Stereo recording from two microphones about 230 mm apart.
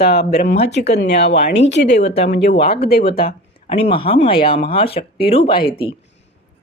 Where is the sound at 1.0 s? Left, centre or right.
Left.